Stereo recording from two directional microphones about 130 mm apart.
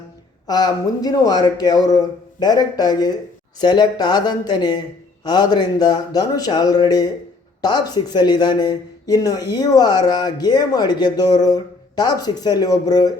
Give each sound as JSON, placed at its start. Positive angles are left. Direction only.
{"t": 0.4, "sound": "a man's voice", "side_deg": 30}